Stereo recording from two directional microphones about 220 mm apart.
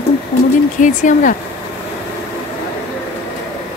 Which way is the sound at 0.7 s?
35° left (ahead or behind).